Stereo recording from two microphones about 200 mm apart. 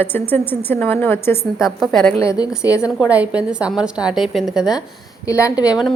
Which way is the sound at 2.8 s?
5° right (ahead or behind).